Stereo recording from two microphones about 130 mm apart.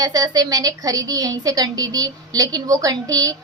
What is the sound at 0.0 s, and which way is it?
A woman's voice, 30° right (ahead or behind).